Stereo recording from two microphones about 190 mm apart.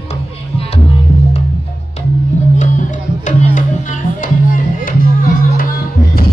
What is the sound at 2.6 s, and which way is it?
Music, 40° left (ahead or behind).